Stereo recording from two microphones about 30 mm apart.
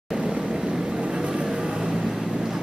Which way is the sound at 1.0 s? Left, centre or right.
Right.